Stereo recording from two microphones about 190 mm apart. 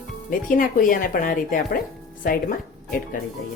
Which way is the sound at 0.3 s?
45° left (ahead or behind).